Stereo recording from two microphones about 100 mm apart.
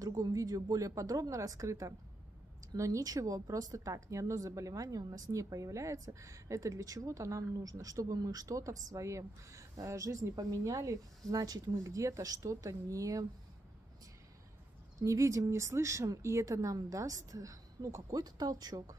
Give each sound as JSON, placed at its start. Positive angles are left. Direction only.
{"t": 0.0, "sound": "a woman's voice", "side_deg": -35}
{"t": 15.0, "sound": "a woman's voice", "side_deg": -35}